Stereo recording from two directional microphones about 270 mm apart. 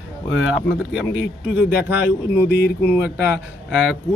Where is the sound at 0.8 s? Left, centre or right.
Centre.